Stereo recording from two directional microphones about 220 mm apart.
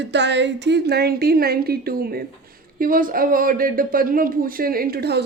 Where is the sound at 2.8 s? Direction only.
40° right (ahead or behind).